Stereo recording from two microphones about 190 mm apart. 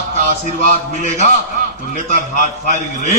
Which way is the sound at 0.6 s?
35° left (ahead or behind).